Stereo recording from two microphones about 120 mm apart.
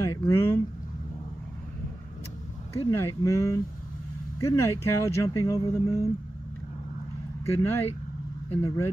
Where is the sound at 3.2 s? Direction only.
25° left (ahead or behind).